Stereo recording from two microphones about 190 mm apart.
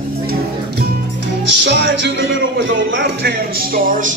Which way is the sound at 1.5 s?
65° right (ahead or behind).